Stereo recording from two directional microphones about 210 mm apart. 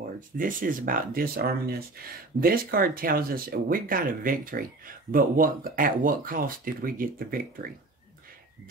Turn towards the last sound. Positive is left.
turn(degrees=-45)  # may be behind; listen again after turning